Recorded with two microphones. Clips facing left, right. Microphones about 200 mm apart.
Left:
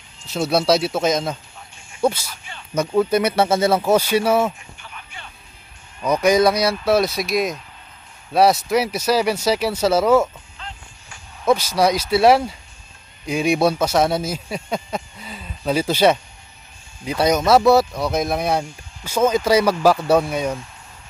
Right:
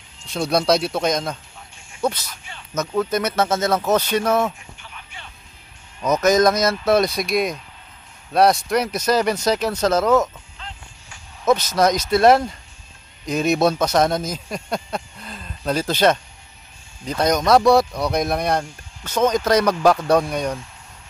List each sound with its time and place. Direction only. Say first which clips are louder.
0.3 s speech: left 1 dB; 5° left (ahead or behind)
4.8 s music: left 2 dB; 50° left (ahead or behind)
6.0 s speech: even; 10° left (ahead or behind)
11.4 s speech: even; 10° left (ahead or behind)